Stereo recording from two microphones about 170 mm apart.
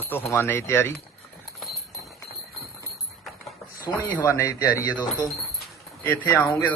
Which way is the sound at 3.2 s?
Centre (ahead or behind).